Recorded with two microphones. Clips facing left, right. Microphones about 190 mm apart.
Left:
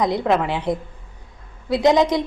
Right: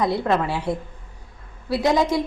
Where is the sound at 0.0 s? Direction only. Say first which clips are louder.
Left 2 dB; 15° left (ahead or behind).